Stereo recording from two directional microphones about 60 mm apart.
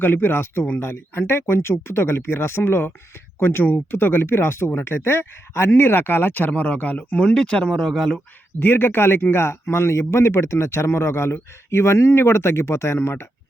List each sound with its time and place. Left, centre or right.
0.0 s speech: left; by 8.2 s centre
8.5 s speech: left